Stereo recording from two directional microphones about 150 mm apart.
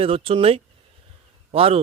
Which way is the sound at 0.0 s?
40° right (ahead or behind).